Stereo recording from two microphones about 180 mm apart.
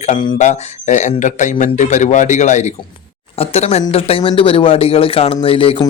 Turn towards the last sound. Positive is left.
turn(degrees=30)  # may be behind; listen again after turning